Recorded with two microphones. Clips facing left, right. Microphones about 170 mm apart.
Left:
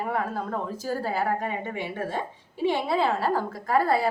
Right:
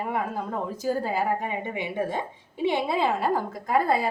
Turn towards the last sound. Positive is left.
turn(degrees=-20)  # may be behind; listen again after turning